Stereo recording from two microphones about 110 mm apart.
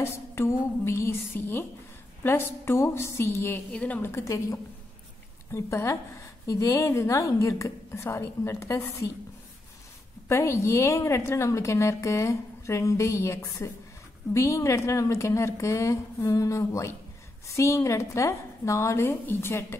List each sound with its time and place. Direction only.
0.0 s a woman's voice: 25° left (ahead or behind)
4.1 s a woman's voice: 30° left (ahead or behind)
10.2 s a woman's voice: 25° left (ahead or behind)